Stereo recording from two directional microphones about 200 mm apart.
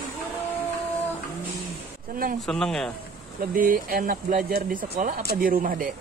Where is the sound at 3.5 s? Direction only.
45° right (ahead or behind).